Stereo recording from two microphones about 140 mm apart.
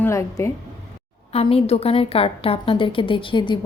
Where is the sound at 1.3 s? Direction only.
45° left (ahead or behind).